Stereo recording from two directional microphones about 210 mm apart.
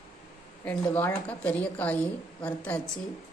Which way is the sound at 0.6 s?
10° left (ahead or behind).